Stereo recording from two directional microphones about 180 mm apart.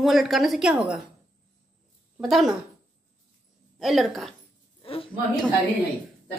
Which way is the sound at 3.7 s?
Centre (ahead or behind).